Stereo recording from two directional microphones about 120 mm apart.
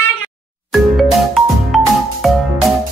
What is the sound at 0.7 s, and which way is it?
Music, centre (ahead or behind).